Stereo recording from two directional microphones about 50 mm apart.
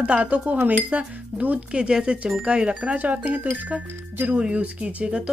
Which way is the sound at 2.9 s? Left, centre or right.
Right.